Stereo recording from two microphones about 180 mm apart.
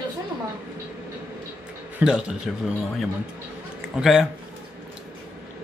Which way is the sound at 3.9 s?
Centre (ahead or behind).